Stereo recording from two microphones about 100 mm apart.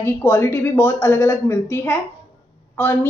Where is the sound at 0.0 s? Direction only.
25° left (ahead or behind).